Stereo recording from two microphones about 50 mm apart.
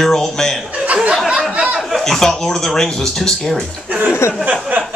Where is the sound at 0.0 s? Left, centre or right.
Centre.